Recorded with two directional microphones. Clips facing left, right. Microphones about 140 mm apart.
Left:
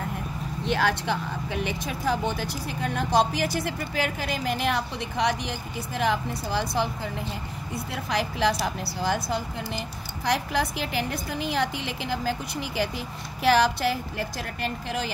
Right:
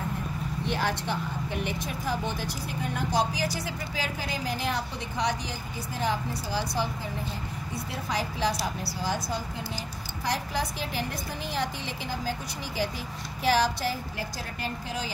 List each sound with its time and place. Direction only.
0.7 s speech: 90° left
3.1 s a woman's voice: 60° left (ahead or behind)